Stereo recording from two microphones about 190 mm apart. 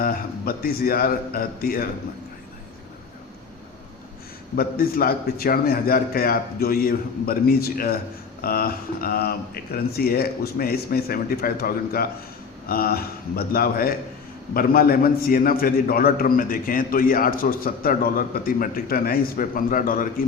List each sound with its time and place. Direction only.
0.0 s a man's voice: 50° left (ahead or behind)
4.5 s a man's voice: 50° left (ahead or behind)